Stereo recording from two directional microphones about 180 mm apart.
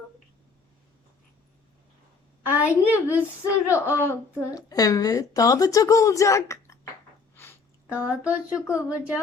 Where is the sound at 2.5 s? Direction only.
10° right (ahead or behind).